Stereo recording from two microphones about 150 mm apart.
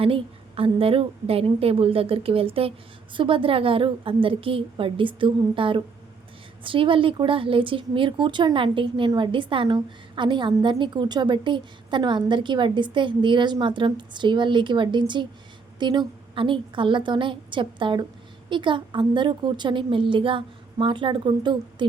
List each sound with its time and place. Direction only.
0.0 s a woman's voice: 40° right (ahead or behind)